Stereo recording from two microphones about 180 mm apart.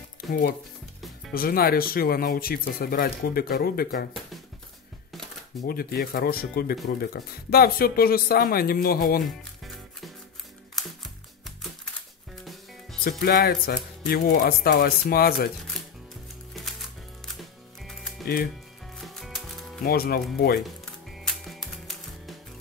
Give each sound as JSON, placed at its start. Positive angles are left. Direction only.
{"t": 0.3, "sound": "speech", "side_deg": 55}
{"t": 5.6, "sound": "speech", "side_deg": 55}
{"t": 9.2, "sound": "music", "side_deg": 0}
{"t": 11.4, "sound": "music", "side_deg": 0}
{"t": 13.2, "sound": "speech", "side_deg": 55}
{"t": 17.4, "sound": "music", "side_deg": 0}
{"t": 18.2, "sound": "speech", "side_deg": 55}
{"t": 18.9, "sound": "music", "side_deg": 0}
{"t": 19.8, "sound": "speech", "side_deg": 60}
{"t": 20.6, "sound": "music", "side_deg": 0}